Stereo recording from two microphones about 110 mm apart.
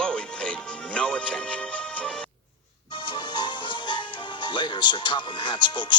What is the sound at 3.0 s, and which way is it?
Music, 45° left (ahead or behind).